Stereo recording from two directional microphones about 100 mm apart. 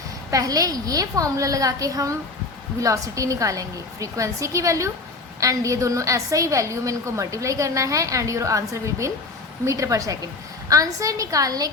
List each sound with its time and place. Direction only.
0.3 s a woman's voice: 35° right (ahead or behind)